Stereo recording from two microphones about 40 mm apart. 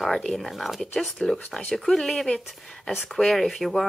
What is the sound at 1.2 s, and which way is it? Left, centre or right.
Speech, centre.